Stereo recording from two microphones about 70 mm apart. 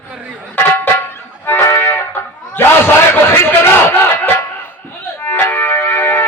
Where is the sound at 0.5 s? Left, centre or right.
Left.